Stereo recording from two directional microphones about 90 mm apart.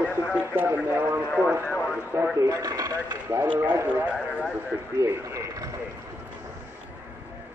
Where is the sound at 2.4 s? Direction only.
40° right (ahead or behind).